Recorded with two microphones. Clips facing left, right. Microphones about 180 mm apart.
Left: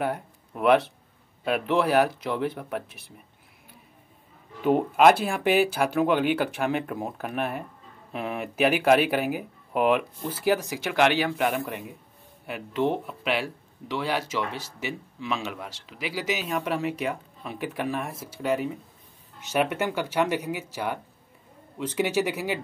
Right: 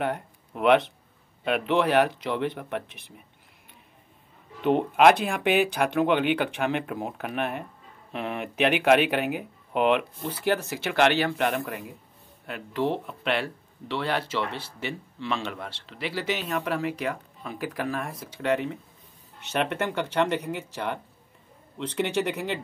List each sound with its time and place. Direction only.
0.0 s speech: 5° left (ahead or behind)
4.6 s speech: 5° left (ahead or behind)